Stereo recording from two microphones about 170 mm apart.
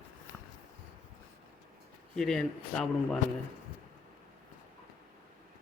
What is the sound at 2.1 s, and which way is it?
Speech, centre (ahead or behind).